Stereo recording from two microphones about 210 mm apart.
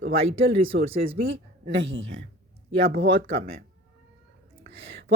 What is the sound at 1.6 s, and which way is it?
Speech, 65° right (ahead or behind).